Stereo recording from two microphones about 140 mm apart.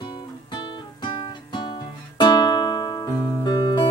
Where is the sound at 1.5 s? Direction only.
35° left (ahead or behind).